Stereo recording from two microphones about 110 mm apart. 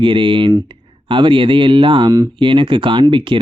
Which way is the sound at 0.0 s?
50° right (ahead or behind).